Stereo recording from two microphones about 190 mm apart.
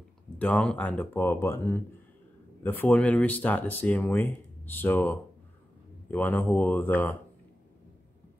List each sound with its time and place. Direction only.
0.4 s speech: 5° left (ahead or behind)